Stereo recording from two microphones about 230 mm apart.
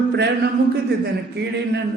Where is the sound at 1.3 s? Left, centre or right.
Right.